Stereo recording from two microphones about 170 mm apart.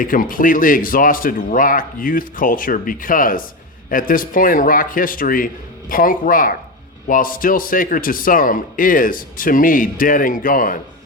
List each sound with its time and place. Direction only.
0.0 s a man's voice: 55° left (ahead or behind)